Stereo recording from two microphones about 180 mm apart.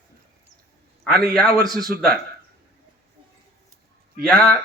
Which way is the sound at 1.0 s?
Centre (ahead or behind).